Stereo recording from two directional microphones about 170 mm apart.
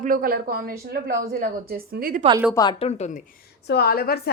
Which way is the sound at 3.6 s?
65° left (ahead or behind).